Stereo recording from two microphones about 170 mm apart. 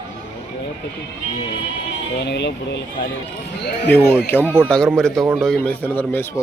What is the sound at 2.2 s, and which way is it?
Speech, 90° left.